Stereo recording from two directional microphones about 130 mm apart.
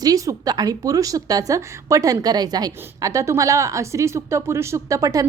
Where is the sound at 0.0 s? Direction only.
30° right (ahead or behind).